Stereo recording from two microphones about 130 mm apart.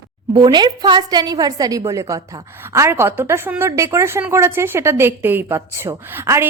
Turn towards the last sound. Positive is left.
turn(degrees=-20)  # may be behind; listen again after turning